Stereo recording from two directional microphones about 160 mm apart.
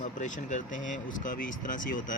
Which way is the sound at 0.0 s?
50° left (ahead or behind).